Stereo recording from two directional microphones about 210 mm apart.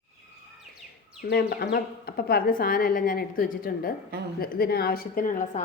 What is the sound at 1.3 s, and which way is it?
A woman's voice, 45° left (ahead or behind).